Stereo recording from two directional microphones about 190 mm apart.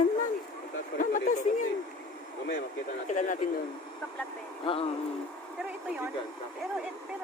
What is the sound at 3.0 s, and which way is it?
Speech, 40° left (ahead or behind).